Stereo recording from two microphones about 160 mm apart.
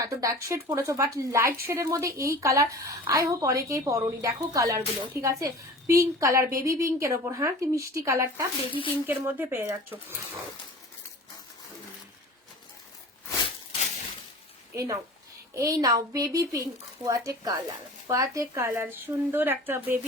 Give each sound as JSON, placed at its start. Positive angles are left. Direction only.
{"t": 0.0, "sound": "a woman's voice", "side_deg": -20}
{"t": 8.7, "sound": "speech", "side_deg": 35}
{"t": 9.0, "sound": "a woman's voice", "side_deg": -15}
{"t": 14.7, "sound": "a woman's voice", "side_deg": -20}